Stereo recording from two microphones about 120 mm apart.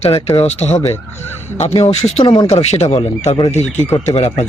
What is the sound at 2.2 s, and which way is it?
Speech, 40° left (ahead or behind).